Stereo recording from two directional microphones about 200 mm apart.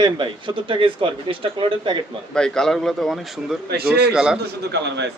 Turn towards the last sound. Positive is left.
turn(degrees=-60)  # may be behind; listen again after turning